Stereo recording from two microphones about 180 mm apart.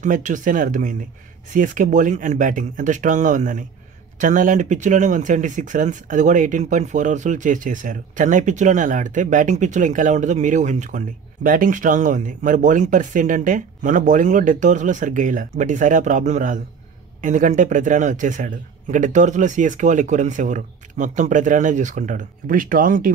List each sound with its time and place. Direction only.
0.0 s speech: 45° right (ahead or behind)